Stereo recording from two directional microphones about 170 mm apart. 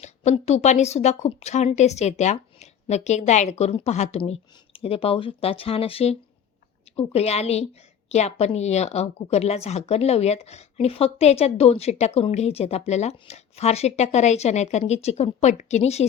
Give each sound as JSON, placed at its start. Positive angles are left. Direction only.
{"t": 0.0, "sound": "a woman's voice", "side_deg": 40}